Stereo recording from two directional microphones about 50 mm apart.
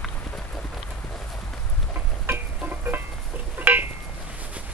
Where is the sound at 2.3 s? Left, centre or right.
Right.